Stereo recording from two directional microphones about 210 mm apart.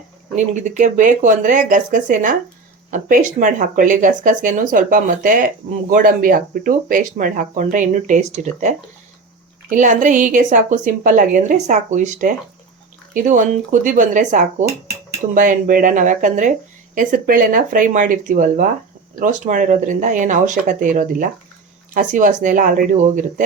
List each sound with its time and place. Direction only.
0.3 s speech: 35° right (ahead or behind)